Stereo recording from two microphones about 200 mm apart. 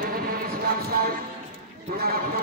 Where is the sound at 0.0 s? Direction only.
45° right (ahead or behind).